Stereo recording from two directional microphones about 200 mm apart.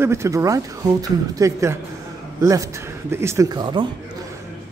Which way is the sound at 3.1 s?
15° right (ahead or behind).